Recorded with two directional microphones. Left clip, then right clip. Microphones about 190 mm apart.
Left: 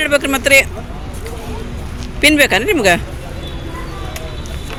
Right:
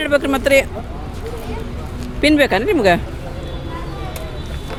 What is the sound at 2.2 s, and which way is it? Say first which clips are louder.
Speech: left 3 dB; 10° right (ahead or behind).